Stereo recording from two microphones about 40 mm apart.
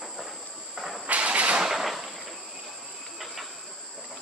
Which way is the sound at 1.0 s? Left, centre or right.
Right.